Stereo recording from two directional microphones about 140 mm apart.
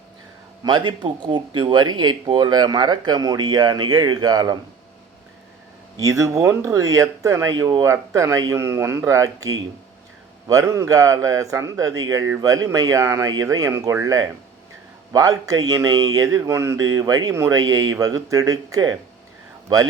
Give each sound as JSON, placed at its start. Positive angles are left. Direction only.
{"t": 0.6, "sound": "speech", "side_deg": -30}
{"t": 6.0, "sound": "speech", "side_deg": -25}